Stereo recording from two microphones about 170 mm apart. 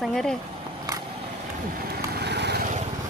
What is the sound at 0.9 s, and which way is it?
Vehicle, 20° right (ahead or behind).